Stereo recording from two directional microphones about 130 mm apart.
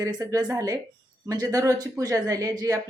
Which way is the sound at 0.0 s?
30° right (ahead or behind).